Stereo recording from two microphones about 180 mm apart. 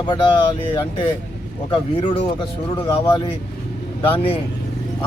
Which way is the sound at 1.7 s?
30° left (ahead or behind).